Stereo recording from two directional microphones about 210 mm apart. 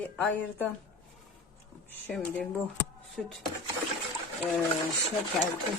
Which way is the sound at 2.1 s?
5° left (ahead or behind).